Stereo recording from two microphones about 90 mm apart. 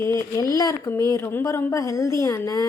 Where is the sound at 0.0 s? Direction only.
35° left (ahead or behind).